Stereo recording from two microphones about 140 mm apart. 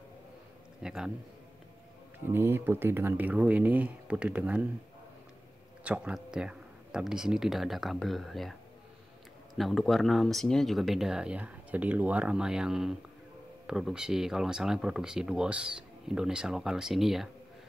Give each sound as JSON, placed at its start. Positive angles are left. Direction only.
{"t": 0.8, "sound": "speech", "side_deg": -5}
{"t": 2.2, "sound": "speech", "side_deg": -15}
{"t": 5.9, "sound": "speech", "side_deg": -5}
{"t": 9.6, "sound": "speech", "side_deg": 0}